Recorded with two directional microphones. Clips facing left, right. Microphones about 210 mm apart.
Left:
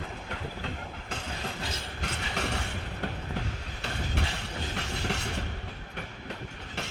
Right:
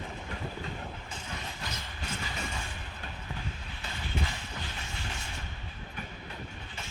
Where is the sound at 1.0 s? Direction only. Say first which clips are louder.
Left 5 dB; 70° left (ahead or behind).